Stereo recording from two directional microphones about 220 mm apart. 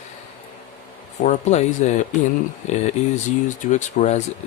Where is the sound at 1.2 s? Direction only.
30° left (ahead or behind).